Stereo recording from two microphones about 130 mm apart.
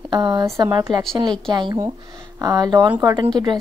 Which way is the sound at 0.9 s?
5° left (ahead or behind).